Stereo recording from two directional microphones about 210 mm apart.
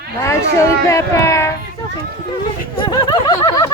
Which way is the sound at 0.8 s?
15° left (ahead or behind).